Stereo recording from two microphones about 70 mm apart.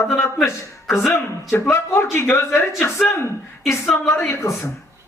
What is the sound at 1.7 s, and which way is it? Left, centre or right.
A man's voice, left.